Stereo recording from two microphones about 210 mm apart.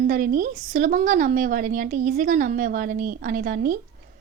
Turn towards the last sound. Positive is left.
turn(degrees=-40)  # may be behind; listen again after turning